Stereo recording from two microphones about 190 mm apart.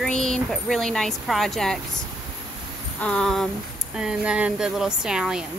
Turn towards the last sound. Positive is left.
turn(degrees=-5)  # may be behind; listen again after turning